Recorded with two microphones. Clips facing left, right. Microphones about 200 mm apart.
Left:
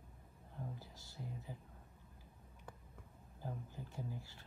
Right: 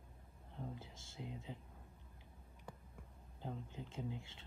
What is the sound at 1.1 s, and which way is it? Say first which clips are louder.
Speech: right 1 dB; 80° right.